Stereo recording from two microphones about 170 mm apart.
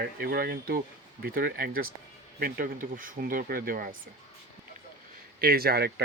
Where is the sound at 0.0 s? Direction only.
65° right (ahead or behind).